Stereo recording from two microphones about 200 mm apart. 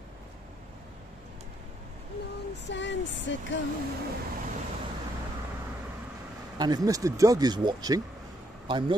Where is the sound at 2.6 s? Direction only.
65° left (ahead or behind).